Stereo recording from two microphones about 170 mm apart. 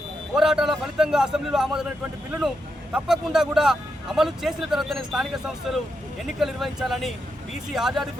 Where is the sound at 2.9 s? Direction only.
5° right (ahead or behind).